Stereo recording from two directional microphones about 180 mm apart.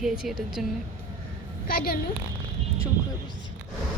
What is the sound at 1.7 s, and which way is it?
Speech, 55° left (ahead or behind).